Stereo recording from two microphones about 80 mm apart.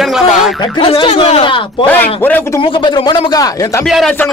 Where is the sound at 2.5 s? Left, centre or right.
Left.